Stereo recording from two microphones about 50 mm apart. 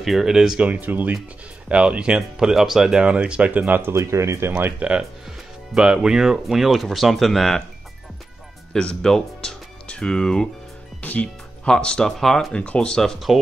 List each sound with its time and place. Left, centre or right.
0.0 s speech: centre
0.6 s speech: right
1.7 s speech: centre
3.0 s speech: right
3.9 s speech: right
4.7 s speech: right
5.8 s speech: centre
8.7 s speech: centre
11.0 s speech: left
11.6 s speech: centre